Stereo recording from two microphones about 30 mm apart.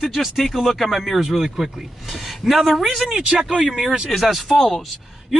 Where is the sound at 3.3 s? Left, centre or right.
Right.